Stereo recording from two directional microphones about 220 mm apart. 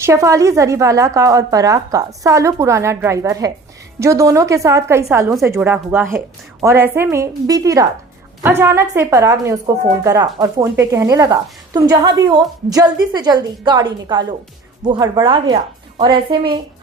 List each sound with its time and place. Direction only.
0.0 s a woman's voice: 15° right (ahead or behind)
5.0 s a woman's voice: centre (ahead or behind); by 16.6 s 20° right (ahead or behind)